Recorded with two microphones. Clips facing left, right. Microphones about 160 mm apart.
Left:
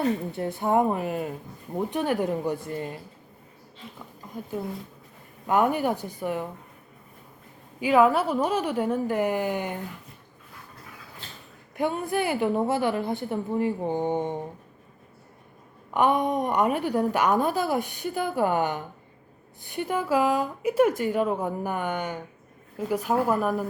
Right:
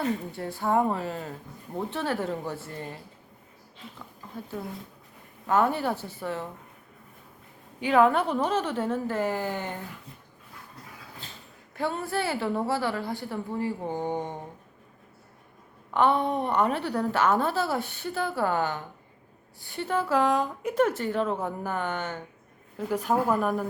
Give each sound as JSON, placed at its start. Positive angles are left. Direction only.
{"t": 0.0, "sound": "a woman's voice", "side_deg": 20}
{"t": 5.5, "sound": "a woman's voice", "side_deg": 15}
{"t": 7.8, "sound": "a woman's voice", "side_deg": 10}
{"t": 11.8, "sound": "a woman's voice", "side_deg": 15}
{"t": 15.9, "sound": "a woman's voice", "side_deg": 15}